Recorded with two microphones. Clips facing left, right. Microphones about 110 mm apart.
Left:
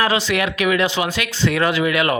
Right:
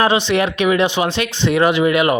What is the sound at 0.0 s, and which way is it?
Speech, 25° right (ahead or behind).